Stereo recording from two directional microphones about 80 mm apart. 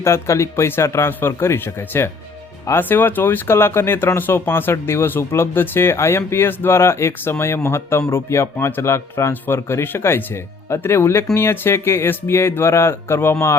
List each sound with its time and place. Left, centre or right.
0.0 s speech: left